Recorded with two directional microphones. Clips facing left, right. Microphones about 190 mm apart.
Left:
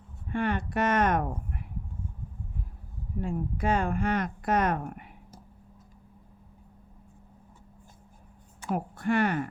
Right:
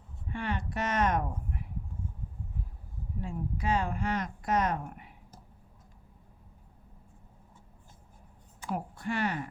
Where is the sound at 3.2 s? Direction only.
55° left (ahead or behind).